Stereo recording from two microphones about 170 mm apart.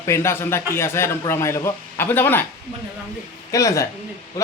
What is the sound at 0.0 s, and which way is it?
A man's voice, 15° left (ahead or behind).